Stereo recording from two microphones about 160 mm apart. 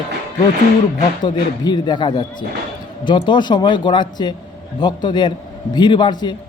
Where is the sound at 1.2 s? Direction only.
25° left (ahead or behind).